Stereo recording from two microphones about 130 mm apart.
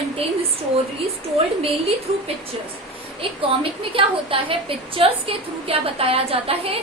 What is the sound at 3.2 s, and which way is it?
A woman's voice, 45° right (ahead or behind).